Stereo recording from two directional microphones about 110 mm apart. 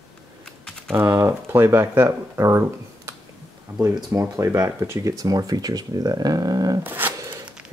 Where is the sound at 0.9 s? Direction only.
25° right (ahead or behind).